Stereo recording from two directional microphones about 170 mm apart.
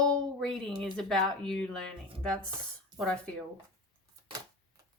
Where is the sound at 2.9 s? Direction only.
5° left (ahead or behind).